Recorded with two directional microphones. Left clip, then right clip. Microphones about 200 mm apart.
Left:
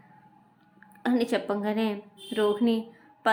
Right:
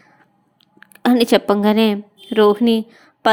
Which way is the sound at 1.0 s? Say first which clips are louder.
Right 12 dB; 45° right (ahead or behind).